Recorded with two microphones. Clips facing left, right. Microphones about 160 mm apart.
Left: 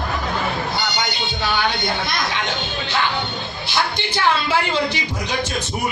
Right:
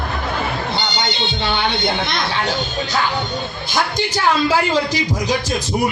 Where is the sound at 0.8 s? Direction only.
25° right (ahead or behind).